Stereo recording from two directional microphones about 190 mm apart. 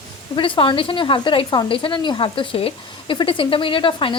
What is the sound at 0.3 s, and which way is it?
Speech, 25° left (ahead or behind).